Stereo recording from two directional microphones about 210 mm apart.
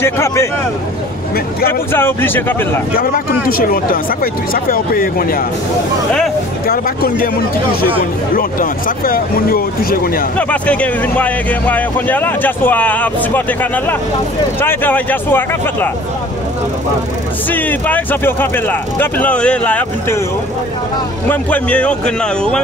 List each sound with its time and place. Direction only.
0.0 s speech: 10° left (ahead or behind)
1.7 s speech: 10° left (ahead or behind)
3.0 s speech: 45° left (ahead or behind)
6.7 s speech: 45° left (ahead or behind)
8.4 s speech: 40° left (ahead or behind)
10.3 s speech: 5° left (ahead or behind)
17.5 s speech: 10° left (ahead or behind)
21.3 s speech: 5° left (ahead or behind)